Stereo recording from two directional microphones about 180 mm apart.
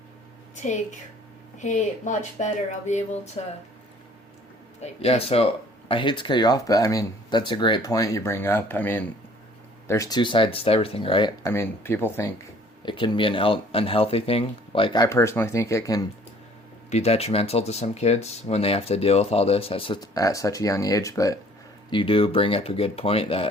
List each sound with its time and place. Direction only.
0.5 s a woman's voice: 40° left (ahead or behind)
4.8 s speech: 35° left (ahead or behind)
11.4 s speech: 15° left (ahead or behind)
12.8 s speech: 25° left (ahead or behind)
16.9 s speech: 35° left (ahead or behind); by 21.3 s 20° left (ahead or behind)
21.8 s speech: 30° left (ahead or behind)